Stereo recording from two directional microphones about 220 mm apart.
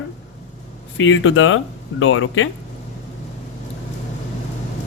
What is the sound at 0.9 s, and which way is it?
Speech, 60° left (ahead or behind).